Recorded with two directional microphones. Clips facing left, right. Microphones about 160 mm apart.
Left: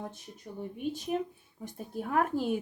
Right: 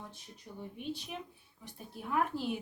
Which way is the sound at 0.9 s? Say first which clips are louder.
Left 12 dB; 45° left (ahead or behind).